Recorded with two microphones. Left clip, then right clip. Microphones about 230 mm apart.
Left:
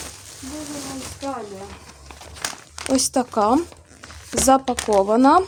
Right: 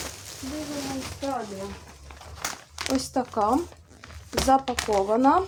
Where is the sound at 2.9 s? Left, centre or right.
Left.